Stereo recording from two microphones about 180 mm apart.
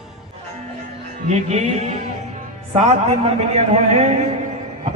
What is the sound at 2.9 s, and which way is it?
A man's voice, 35° right (ahead or behind).